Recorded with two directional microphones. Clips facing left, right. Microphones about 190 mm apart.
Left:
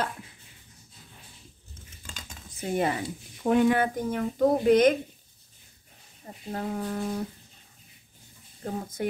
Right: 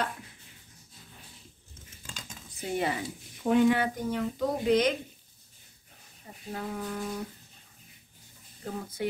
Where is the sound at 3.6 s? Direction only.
50° left (ahead or behind).